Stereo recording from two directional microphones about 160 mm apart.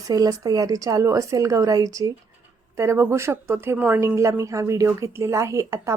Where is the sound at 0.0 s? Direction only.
20° right (ahead or behind).